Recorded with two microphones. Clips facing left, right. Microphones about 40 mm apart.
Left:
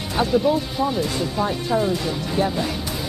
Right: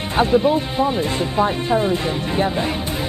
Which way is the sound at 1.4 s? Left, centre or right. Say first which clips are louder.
Right 4 dB; right.